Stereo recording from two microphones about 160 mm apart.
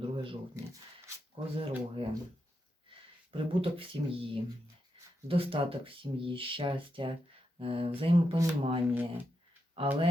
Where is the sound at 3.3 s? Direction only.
35° right (ahead or behind).